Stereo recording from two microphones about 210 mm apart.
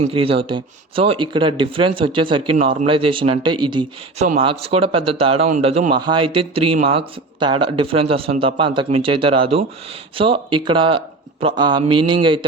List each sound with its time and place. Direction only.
0.0 s speech: 25° right (ahead or behind)